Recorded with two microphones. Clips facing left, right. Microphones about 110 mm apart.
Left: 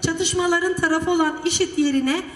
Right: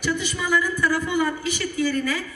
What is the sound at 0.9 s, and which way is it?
Speech, 65° left (ahead or behind).